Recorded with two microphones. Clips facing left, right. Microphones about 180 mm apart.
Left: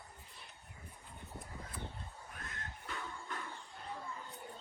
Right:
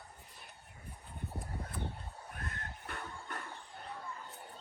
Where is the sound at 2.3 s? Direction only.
55° right (ahead or behind).